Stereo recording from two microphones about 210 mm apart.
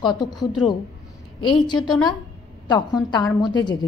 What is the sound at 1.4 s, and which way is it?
Speech, 20° left (ahead or behind).